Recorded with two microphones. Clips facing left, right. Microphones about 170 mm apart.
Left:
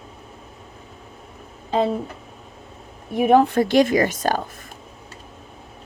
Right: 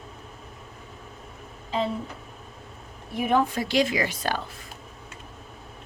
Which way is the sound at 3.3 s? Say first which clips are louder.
Left 8 dB; 60° left (ahead or behind).